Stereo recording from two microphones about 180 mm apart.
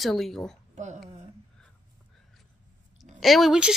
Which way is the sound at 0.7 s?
40° right (ahead or behind).